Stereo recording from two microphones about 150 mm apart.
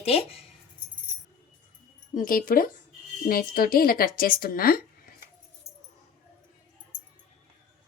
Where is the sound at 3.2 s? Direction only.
80° left.